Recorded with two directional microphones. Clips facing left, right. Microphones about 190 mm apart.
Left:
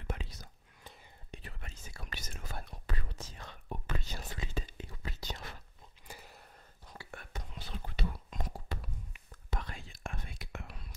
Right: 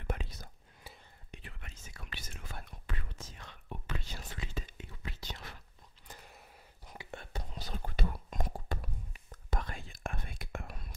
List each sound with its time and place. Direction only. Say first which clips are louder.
0.0 s whispering: right 2 dB; 55° right (ahead or behind)
1.3 s whispering: left 2 dB; 35° left (ahead or behind)
6.0 s a sound: left 2 dB; 5° left (ahead or behind)
6.9 s whispering: right 3 dB; 20° right (ahead or behind)
7.5 s whispering: right 3 dB; 45° right (ahead or behind)